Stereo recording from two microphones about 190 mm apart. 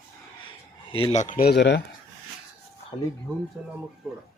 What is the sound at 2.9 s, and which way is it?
Speech, 20° left (ahead or behind).